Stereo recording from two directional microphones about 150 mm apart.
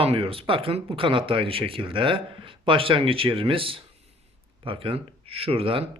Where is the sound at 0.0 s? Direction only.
40° right (ahead or behind).